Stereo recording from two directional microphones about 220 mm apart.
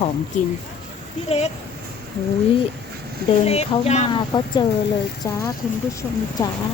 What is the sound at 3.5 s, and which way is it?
Speech, 30° left (ahead or behind).